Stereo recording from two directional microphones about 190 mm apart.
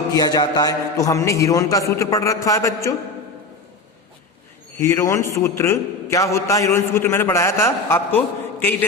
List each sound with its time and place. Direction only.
0.1 s a man's voice: 20° left (ahead or behind)
4.8 s a man's voice: 15° left (ahead or behind)